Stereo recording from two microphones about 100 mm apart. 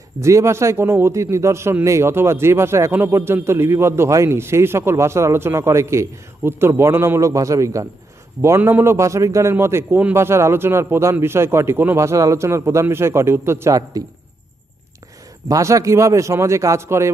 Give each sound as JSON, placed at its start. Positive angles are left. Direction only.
{"t": 0.2, "sound": "a man's voice", "side_deg": -30}
{"t": 15.4, "sound": "a man's voice", "side_deg": -35}